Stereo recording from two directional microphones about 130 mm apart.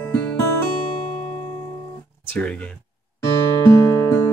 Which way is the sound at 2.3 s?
10° left (ahead or behind).